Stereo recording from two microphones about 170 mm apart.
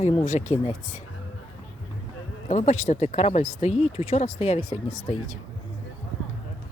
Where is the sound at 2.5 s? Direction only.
40° left (ahead or behind).